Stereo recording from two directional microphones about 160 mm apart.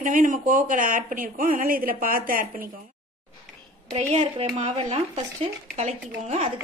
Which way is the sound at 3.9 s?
40° right (ahead or behind).